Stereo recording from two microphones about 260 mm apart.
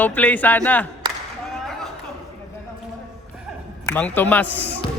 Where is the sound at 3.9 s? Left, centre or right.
Centre.